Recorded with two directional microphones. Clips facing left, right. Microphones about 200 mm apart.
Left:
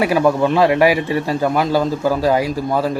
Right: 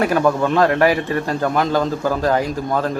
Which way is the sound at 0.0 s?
10° left (ahead or behind).